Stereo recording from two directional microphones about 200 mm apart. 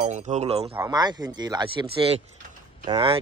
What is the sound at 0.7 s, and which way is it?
Speech, 15° right (ahead or behind).